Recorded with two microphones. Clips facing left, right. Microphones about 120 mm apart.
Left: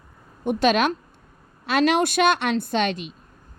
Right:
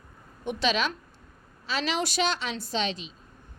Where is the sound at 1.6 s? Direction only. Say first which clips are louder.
Left 9 dB; 60° left (ahead or behind).